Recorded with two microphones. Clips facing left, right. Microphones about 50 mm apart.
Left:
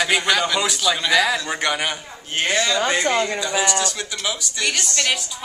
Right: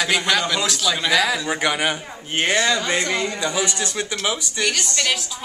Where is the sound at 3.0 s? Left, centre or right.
Left.